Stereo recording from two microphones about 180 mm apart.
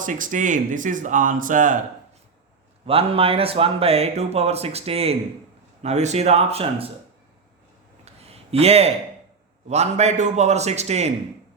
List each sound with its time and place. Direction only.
0.0 s speech: 45° right (ahead or behind)
2.8 s speech: 30° right (ahead or behind)
8.0 s a sound: 35° right (ahead or behind)
9.6 s speech: 35° right (ahead or behind)